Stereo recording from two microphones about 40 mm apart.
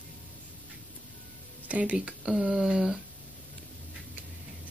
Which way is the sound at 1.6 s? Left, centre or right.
Right.